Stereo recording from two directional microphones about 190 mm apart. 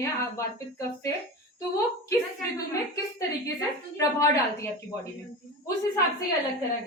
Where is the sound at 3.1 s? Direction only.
15° left (ahead or behind).